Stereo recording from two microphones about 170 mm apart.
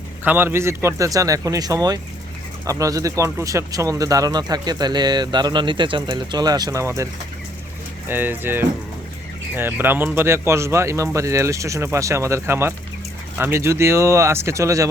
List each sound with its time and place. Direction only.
0.3 s speech: 15° right (ahead or behind)